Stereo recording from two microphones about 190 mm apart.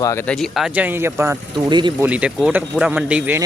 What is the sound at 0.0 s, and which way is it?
Speech, 15° left (ahead or behind).